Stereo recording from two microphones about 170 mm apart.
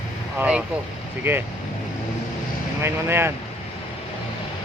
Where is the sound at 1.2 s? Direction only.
15° right (ahead or behind).